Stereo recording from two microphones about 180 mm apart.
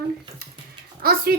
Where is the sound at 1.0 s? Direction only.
55° right (ahead or behind).